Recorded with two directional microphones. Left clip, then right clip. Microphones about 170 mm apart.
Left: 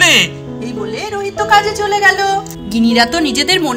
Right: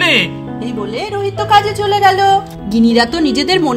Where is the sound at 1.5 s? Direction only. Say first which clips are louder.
Even; 30° right (ahead or behind).